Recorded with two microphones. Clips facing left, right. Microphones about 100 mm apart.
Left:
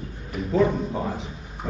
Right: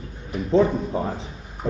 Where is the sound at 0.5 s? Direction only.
30° right (ahead or behind).